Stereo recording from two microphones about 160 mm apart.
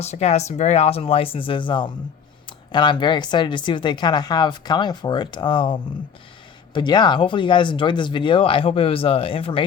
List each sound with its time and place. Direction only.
0.0 s speech: 40° left (ahead or behind)